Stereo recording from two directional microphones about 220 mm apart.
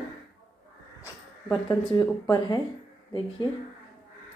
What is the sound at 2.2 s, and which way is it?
Speech, 15° left (ahead or behind).